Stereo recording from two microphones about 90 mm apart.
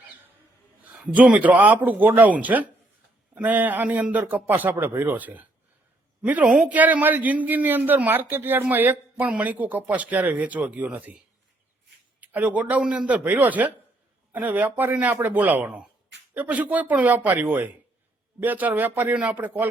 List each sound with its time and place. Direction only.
1.0 s a man's voice: 15° right (ahead or behind)
12.2 s a man's voice: 15° right (ahead or behind)